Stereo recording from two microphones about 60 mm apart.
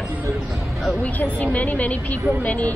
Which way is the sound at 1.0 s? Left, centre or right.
Left.